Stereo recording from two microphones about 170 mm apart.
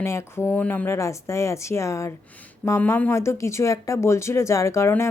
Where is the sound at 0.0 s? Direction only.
15° left (ahead or behind).